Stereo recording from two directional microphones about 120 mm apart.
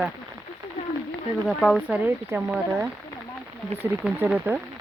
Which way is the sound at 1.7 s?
10° right (ahead or behind).